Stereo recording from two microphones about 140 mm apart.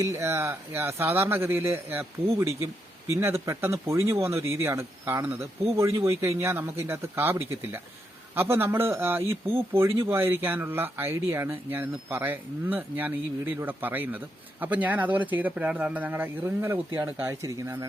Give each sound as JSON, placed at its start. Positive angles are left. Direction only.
{"t": 0.0, "sound": "speech", "side_deg": -20}